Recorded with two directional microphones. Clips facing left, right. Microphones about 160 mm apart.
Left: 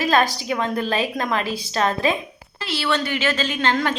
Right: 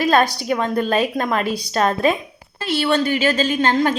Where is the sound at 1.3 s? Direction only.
40° right (ahead or behind).